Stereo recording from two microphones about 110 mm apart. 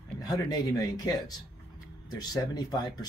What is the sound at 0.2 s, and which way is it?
Speech, 35° left (ahead or behind).